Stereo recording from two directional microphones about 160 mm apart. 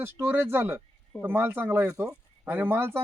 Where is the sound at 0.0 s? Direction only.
15° right (ahead or behind).